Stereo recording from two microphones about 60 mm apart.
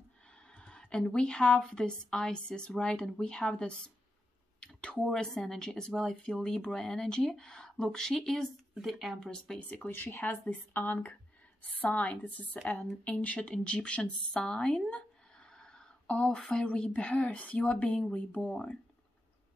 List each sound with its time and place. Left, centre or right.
0.5 s speech: centre
9.8 s speech: left; by 14.9 s centre
14.9 s a sound: centre
16.3 s speech: centre